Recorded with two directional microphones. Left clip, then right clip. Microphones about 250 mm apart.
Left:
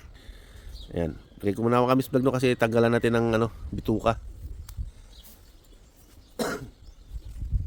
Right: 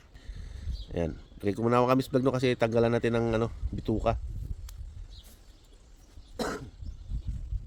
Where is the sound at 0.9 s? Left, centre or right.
Centre.